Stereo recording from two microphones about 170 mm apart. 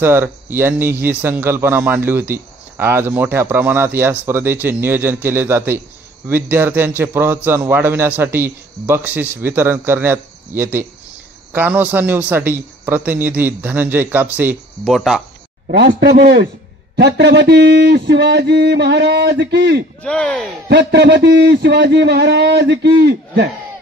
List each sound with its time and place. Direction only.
0.0 s speech: 15° right (ahead or behind)
15.8 s a man's voice: 80° right
16.9 s speech: 80° right
20.0 s speech: 5° left (ahead or behind)
20.6 s speech: 80° right